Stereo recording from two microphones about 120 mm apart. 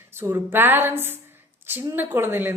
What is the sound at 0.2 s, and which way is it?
Speech, 20° right (ahead or behind).